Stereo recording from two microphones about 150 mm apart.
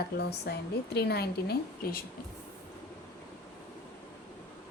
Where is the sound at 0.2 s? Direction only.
90° left.